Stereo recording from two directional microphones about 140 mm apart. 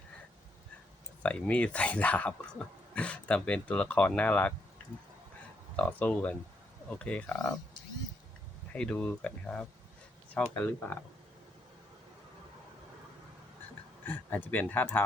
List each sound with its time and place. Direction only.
1.2 s speech: 10° left (ahead or behind)
5.7 s speech: 10° left (ahead or behind)
8.7 s speech: 5° left (ahead or behind)
14.0 s speech: 15° left (ahead or behind)